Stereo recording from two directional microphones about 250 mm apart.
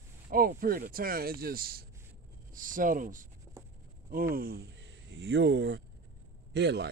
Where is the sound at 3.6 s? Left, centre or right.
Centre.